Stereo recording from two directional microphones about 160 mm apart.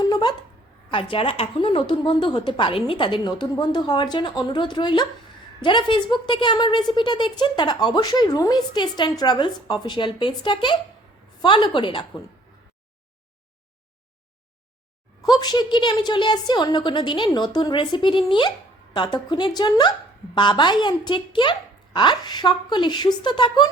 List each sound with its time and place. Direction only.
0.0 s a sound: 25° left (ahead or behind)
0.9 s a woman's voice: 30° left (ahead or behind)
15.2 s a woman's voice: 25° left (ahead or behind)